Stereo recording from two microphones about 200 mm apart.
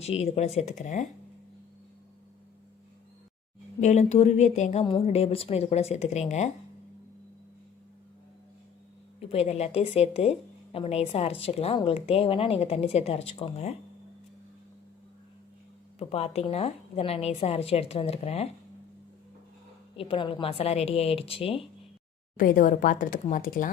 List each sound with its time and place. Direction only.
0.0 s a woman's voice: 30° left (ahead or behind)
3.8 s a woman's voice: 35° left (ahead or behind)
9.3 s a woman's voice: 30° left (ahead or behind)
16.0 s a woman's voice: 30° left (ahead or behind)
20.0 s speech: 25° left (ahead or behind)
22.4 s a woman's voice: 40° left (ahead or behind)